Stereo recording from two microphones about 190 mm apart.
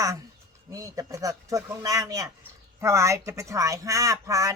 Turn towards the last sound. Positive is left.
turn(degrees=-15)  # may be behind; listen again after turning